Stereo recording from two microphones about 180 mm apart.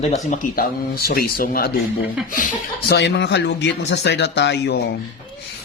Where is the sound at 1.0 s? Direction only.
55° left (ahead or behind).